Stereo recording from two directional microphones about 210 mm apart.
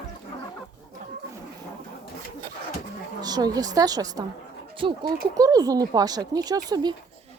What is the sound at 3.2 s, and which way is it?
Speech, 20° right (ahead or behind).